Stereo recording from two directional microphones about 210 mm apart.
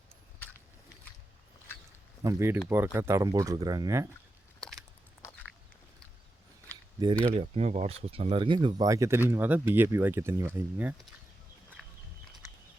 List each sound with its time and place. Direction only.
2.2 s speech: 10° right (ahead or behind)
7.3 s speech: 30° right (ahead or behind); by 11.0 s 10° right (ahead or behind)
11.8 s walk: centre (ahead or behind)